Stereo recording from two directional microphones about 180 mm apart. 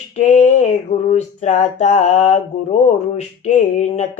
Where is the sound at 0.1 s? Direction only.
40° left (ahead or behind).